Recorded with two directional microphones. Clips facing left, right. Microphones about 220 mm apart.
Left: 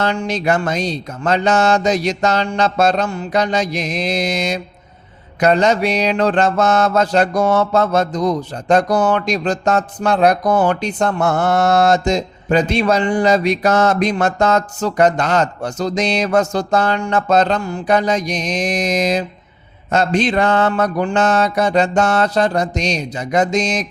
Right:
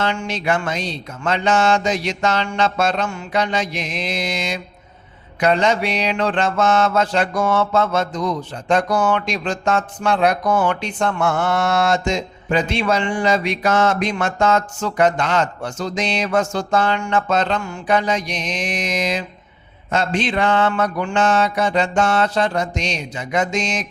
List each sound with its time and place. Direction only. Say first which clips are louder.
0.0 s mantra: left 4 dB; 40° left (ahead or behind)